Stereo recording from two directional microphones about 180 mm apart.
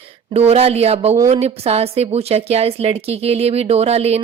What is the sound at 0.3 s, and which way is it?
A woman's voice, 35° right (ahead or behind).